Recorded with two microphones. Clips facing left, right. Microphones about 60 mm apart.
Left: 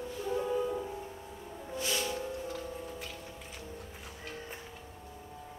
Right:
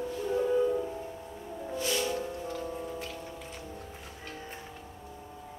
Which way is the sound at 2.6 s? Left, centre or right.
Centre.